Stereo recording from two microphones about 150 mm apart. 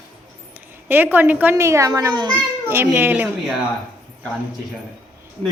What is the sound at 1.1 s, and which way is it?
A woman's voice, 10° right (ahead or behind).